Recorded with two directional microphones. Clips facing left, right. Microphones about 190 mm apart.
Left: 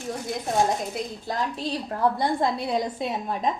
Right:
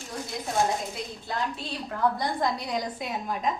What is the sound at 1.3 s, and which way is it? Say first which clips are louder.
A woman's voice: left 4 dB; 40° left (ahead or behind).